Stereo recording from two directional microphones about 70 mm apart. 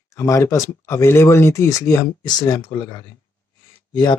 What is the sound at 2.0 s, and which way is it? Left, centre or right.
Speech, left.